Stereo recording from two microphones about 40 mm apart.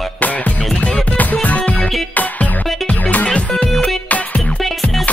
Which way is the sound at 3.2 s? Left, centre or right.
Left.